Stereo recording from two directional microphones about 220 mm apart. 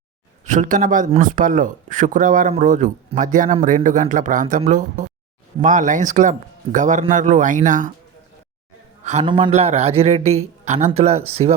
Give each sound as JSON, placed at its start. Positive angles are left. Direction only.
{"t": 0.4, "sound": "speech", "side_deg": -35}
{"t": 9.0, "sound": "a man's voice", "side_deg": -25}